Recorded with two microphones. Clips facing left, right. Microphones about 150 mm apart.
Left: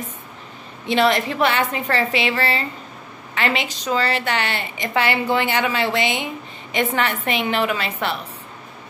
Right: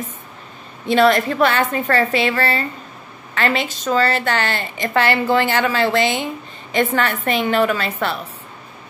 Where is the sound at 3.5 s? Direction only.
15° left (ahead or behind).